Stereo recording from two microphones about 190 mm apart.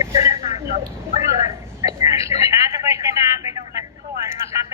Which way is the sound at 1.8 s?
15° right (ahead or behind).